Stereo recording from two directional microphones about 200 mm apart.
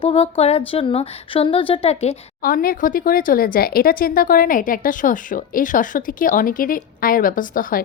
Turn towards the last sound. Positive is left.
turn(degrees=45)  # may be behind; listen again after turning